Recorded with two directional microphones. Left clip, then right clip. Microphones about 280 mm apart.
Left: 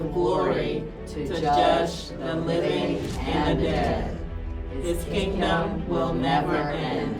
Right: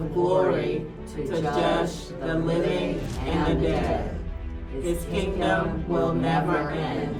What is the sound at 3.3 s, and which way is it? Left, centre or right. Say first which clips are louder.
Music: even; centre.